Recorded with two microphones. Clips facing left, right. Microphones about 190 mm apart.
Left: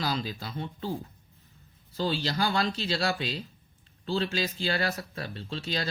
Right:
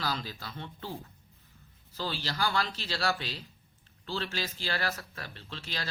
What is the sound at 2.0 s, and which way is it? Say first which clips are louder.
Speech: left 5 dB; 20° left (ahead or behind).